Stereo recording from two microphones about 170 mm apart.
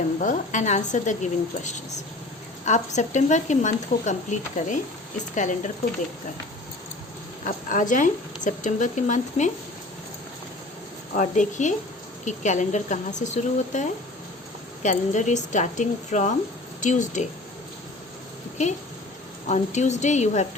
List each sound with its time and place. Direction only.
0.2 s speech: 50° left (ahead or behind)
7.4 s speech: 50° left (ahead or behind)
11.1 s speech: 45° left (ahead or behind)
19.5 s speech: 45° left (ahead or behind)